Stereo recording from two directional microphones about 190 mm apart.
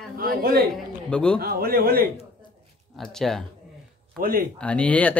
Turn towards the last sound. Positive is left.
turn(degrees=5)  # may be behind; listen again after turning